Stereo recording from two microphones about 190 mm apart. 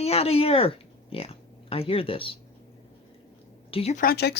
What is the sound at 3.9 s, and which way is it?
Speech, 50° left (ahead or behind).